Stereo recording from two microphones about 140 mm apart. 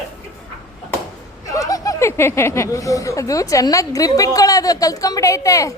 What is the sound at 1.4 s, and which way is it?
Speech, 25° left (ahead or behind).